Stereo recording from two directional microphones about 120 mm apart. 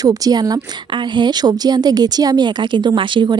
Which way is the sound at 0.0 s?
30° right (ahead or behind).